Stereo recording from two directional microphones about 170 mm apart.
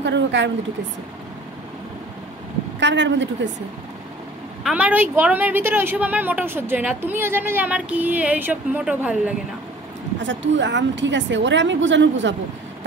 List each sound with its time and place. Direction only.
0.0 s speech: 90° right
2.8 s a woman's voice: 90° right
4.6 s a woman's voice: 10° right (ahead or behind)
10.2 s a woman's voice: 90° right